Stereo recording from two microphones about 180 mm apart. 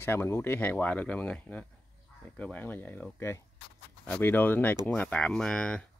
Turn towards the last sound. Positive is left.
turn(degrees=5)  # may be behind; listen again after turning